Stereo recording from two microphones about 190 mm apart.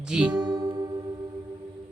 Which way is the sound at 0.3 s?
25° right (ahead or behind).